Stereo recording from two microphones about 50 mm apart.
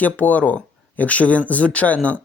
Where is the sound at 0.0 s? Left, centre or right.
Left.